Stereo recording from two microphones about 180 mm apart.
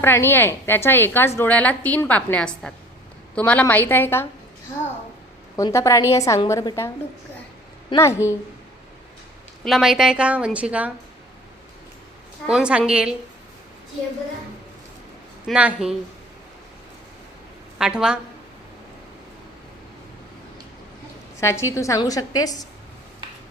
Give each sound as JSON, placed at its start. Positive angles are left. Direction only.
{"t": 0.0, "sound": "a woman's voice", "side_deg": 15}
{"t": 5.5, "sound": "a woman's voice", "side_deg": 20}
{"t": 7.9, "sound": "a woman's voice", "side_deg": 15}
{"t": 9.6, "sound": "a woman's voice", "side_deg": 0}
{"t": 12.5, "sound": "a woman's voice", "side_deg": -5}
{"t": 15.4, "sound": "a woman's voice", "side_deg": -5}
{"t": 17.7, "sound": "a woman's voice", "side_deg": -5}
{"t": 21.4, "sound": "a woman's voice", "side_deg": 15}